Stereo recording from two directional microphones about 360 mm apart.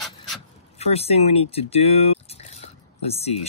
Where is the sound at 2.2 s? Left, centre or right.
Centre.